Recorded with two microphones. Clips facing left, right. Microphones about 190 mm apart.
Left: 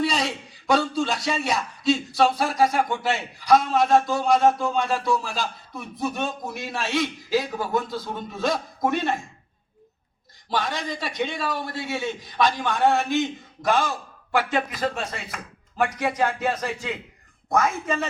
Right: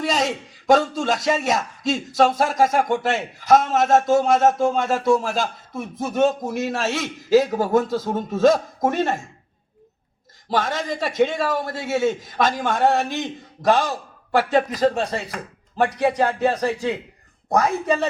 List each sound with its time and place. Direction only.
0.0 s speech: 45° right (ahead or behind)
10.5 s speech: 45° right (ahead or behind)